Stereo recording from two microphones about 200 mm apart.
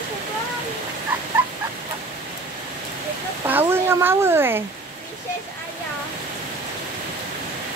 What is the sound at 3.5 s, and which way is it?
A woman's voice, 10° right (ahead or behind).